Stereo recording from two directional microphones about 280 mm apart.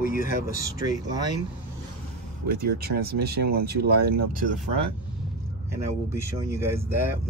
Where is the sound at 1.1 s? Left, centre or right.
Centre.